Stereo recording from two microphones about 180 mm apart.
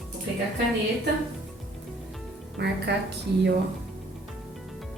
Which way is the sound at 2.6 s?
70° right (ahead or behind).